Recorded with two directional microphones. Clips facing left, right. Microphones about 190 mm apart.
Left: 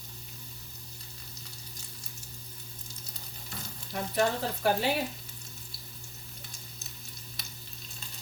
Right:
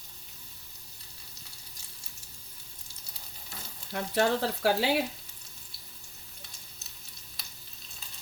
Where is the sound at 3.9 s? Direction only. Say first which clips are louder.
Right 2 dB; 70° right (ahead or behind).